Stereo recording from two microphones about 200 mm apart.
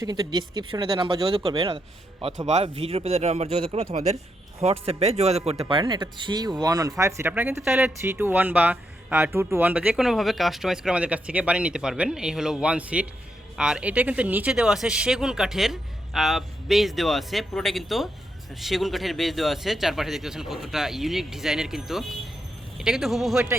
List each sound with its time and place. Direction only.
0.0 s speech: 20° right (ahead or behind); by 23.4 s centre (ahead or behind)